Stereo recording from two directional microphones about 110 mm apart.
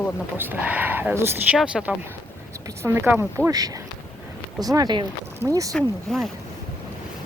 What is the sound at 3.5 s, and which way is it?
Speech, 35° right (ahead or behind).